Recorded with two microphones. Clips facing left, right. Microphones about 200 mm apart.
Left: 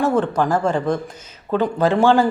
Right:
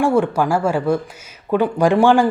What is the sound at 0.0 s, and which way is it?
Speech, 10° right (ahead or behind).